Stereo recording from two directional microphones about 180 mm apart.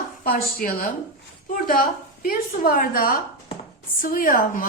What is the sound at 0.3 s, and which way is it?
A woman's voice, 55° left (ahead or behind).